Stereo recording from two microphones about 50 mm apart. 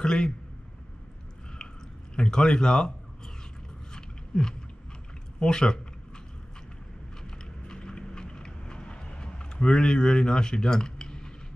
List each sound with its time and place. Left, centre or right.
0.0 s speech: centre
2.1 s speech: centre
3.9 s a sound: centre
5.4 s speech: centre
7.2 s clip-clop: centre